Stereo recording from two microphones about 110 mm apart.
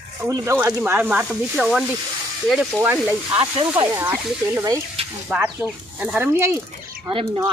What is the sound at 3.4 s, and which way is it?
Speech, 55° right (ahead or behind).